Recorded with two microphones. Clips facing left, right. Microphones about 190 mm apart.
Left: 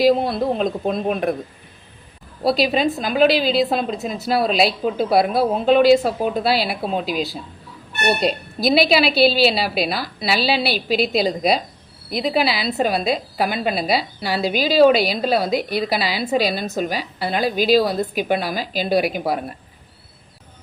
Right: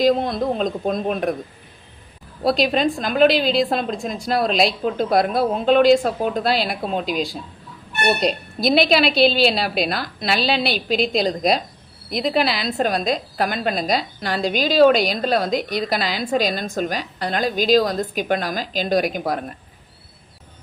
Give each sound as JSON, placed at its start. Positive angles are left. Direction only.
{"t": 0.0, "sound": "a woman's voice", "side_deg": 5}
{"t": 2.4, "sound": "a woman's voice", "side_deg": 5}